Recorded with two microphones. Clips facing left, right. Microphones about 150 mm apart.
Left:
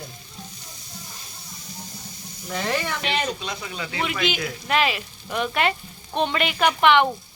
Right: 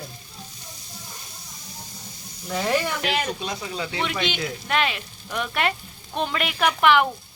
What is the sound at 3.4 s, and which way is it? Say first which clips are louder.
Speech: right 2 dB; 35° right (ahead or behind).